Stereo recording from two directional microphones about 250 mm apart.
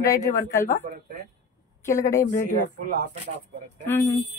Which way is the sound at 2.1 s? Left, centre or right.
Left.